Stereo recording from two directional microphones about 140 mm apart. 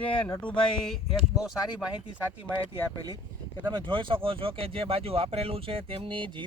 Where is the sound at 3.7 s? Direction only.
35° right (ahead or behind).